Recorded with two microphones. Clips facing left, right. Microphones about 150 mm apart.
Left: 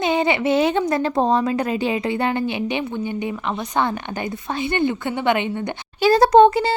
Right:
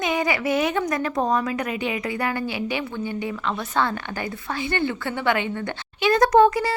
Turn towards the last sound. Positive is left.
turn(degrees=25)  # may be behind; listen again after turning